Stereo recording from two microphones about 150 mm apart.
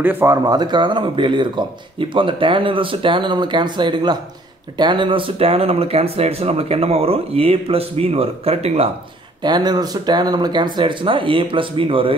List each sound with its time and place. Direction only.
0.0 s speech: 15° right (ahead or behind); by 8.9 s 45° right (ahead or behind)
9.4 s speech: 30° right (ahead or behind)